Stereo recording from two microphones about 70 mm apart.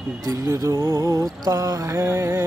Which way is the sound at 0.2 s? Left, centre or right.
Right.